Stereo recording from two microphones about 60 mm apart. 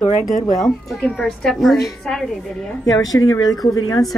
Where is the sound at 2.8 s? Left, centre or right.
Left.